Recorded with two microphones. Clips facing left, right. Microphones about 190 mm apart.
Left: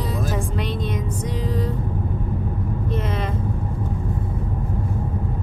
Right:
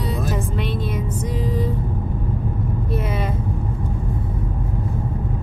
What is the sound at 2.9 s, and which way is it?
Vehicle, 5° right (ahead or behind).